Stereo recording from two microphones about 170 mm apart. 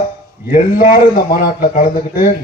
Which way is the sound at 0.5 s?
55° left (ahead or behind).